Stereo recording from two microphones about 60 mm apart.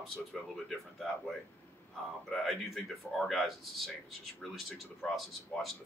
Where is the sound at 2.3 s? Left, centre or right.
Centre.